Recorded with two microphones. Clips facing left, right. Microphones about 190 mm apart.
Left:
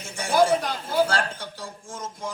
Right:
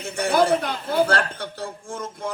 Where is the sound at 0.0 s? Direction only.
60° right (ahead or behind).